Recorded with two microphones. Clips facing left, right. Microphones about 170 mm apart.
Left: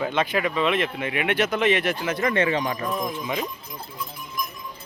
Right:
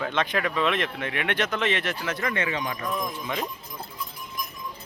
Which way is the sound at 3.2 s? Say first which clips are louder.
Left 2 dB; 10° left (ahead or behind).